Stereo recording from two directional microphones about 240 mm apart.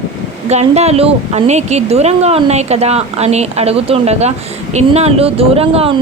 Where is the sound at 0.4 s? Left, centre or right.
Right.